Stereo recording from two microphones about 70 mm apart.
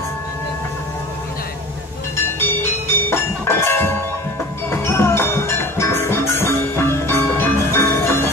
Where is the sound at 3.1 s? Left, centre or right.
Left.